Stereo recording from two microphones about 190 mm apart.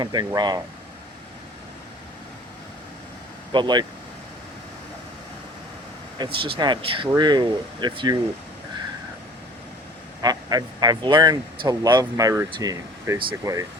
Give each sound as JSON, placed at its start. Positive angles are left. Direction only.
{"t": 0.0, "sound": "speech", "side_deg": -20}
{"t": 3.5, "sound": "speech", "side_deg": -25}
{"t": 6.1, "sound": "speech", "side_deg": -25}
{"t": 10.2, "sound": "speech", "side_deg": -20}